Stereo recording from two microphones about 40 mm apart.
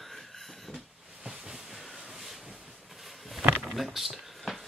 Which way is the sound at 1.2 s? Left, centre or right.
Centre.